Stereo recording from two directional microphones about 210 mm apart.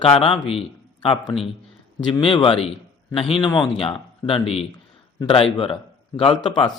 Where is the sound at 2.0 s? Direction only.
25° left (ahead or behind).